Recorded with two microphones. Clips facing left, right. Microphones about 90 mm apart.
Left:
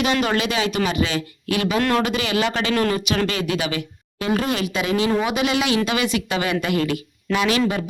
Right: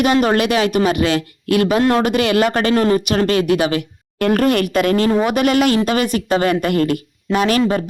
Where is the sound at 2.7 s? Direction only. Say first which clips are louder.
Right 5 dB; 35° right (ahead or behind).